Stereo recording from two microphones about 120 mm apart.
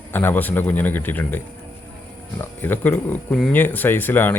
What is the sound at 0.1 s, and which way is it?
Speech, 15° left (ahead or behind).